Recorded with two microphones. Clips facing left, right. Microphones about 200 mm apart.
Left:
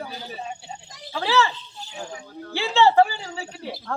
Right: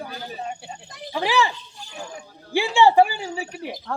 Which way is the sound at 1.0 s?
15° right (ahead or behind).